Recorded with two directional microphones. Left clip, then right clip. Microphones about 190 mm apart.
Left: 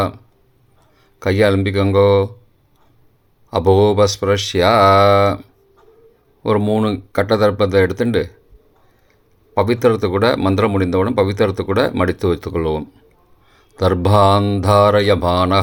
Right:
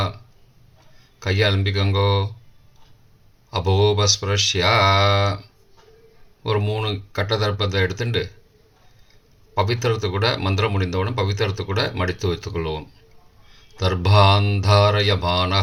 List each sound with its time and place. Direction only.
1.2 s speech: 50° left (ahead or behind)
3.5 s speech: 50° left (ahead or behind)
6.4 s speech: 50° left (ahead or behind)
9.6 s speech: 50° left (ahead or behind)